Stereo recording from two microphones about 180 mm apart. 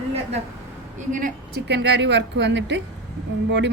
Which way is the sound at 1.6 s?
70° right (ahead or behind).